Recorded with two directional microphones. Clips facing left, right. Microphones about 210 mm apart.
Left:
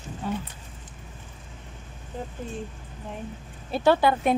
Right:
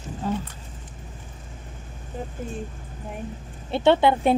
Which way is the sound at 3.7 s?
25° right (ahead or behind).